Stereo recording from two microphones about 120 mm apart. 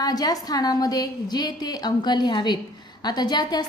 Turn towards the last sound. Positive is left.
turn(degrees=35)  # may be behind; listen again after turning